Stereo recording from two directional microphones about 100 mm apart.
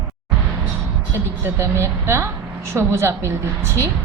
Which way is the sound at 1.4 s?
30° right (ahead or behind).